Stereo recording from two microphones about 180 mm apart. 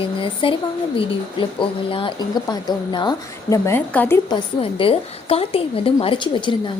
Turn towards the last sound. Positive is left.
turn(degrees=25)  # may be behind; listen again after turning